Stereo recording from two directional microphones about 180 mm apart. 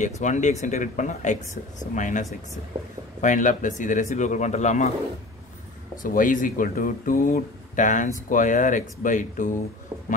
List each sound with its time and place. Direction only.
0.0 s speech: 40° left (ahead or behind)
6.0 s speech: 50° left (ahead or behind)